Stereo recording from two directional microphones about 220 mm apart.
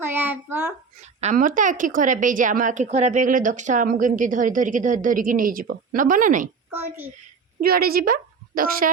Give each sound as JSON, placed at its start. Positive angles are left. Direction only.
{"t": 0.0, "sound": "a sound", "side_deg": -10}
{"t": 1.2, "sound": "a woman's voice", "side_deg": -35}
{"t": 7.6, "sound": "speech", "side_deg": -45}